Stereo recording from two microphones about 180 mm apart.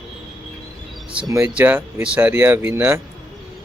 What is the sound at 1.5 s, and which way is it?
Speech, 10° right (ahead or behind).